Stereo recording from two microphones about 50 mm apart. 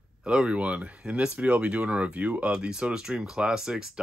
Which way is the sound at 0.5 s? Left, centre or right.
Right.